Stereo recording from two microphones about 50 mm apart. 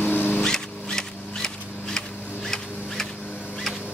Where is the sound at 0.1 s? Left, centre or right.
Left.